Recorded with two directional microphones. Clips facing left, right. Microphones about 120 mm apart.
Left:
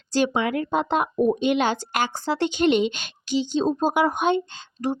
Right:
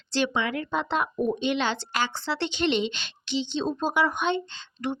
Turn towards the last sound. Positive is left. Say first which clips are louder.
# left 4 dB
turn(degrees=40)  # may be behind; listen again after turning